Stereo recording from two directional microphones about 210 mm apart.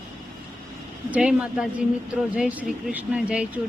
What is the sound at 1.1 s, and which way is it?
Speech, 5° right (ahead or behind).